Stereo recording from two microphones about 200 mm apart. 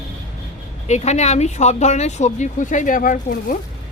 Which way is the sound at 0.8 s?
35° left (ahead or behind).